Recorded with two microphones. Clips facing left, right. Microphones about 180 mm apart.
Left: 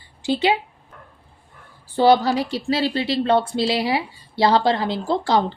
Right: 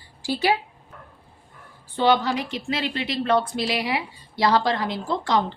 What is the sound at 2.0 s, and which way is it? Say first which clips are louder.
A woman's voice: left 5 dB; 35° left (ahead or behind).